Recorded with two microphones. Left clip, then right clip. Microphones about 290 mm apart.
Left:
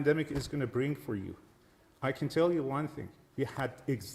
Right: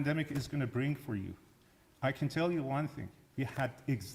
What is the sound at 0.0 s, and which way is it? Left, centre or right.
Speech, right.